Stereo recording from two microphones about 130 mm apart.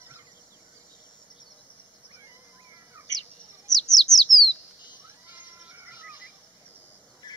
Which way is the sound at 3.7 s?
Centre (ahead or behind).